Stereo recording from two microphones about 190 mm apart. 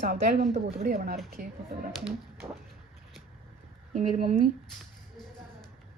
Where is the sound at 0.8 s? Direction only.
50° right (ahead or behind).